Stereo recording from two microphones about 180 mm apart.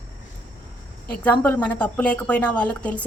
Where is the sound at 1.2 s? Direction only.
10° left (ahead or behind).